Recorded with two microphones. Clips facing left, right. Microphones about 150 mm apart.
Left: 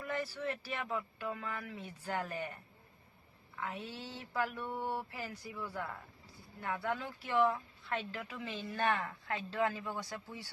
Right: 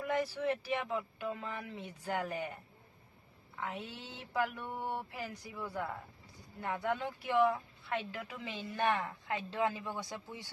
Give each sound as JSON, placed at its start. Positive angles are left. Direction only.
{"t": 0.1, "sound": "speech", "side_deg": -15}
{"t": 3.6, "sound": "speech", "side_deg": -15}